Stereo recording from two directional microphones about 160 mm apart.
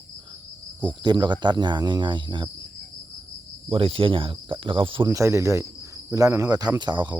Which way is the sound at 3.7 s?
35° right (ahead or behind).